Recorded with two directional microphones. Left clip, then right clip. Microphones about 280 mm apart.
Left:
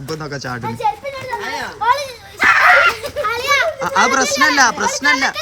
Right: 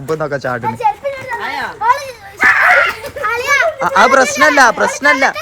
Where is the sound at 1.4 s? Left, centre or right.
Centre.